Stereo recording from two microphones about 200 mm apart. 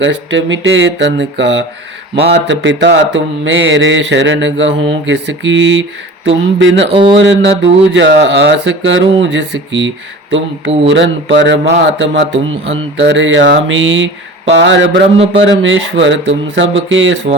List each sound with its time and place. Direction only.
0.0 s mantra: 65° right (ahead or behind)
6.8 s speech: 25° right (ahead or behind)
7.2 s speech: 65° right (ahead or behind)
10.8 s mantra: 65° right (ahead or behind)
14.5 s speech: 65° right (ahead or behind)
15.4 s mantra: 70° right (ahead or behind)